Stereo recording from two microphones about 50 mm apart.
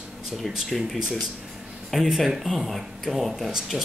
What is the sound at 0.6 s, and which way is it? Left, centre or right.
Speech, centre.